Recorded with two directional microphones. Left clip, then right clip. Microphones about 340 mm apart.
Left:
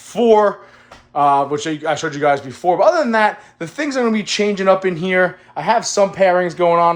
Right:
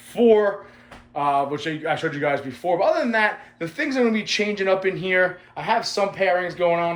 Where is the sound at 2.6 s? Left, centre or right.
Left.